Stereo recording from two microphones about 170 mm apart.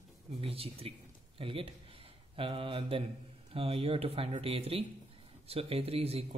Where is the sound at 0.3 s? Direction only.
35° right (ahead or behind).